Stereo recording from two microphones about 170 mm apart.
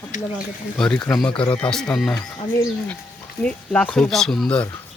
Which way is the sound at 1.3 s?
30° left (ahead or behind).